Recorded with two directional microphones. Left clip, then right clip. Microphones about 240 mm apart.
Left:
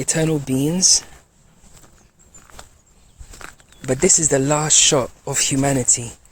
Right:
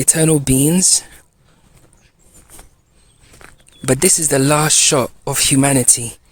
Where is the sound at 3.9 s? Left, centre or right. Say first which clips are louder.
Right 2 dB; right.